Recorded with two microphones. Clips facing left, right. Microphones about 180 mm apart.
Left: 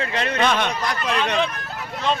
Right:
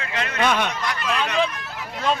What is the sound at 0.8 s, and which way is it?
Speech, 35° left (ahead or behind).